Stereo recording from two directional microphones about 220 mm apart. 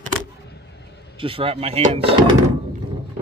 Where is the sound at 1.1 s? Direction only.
25° right (ahead or behind).